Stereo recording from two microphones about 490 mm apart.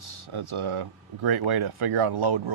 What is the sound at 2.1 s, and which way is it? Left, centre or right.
Speech, right.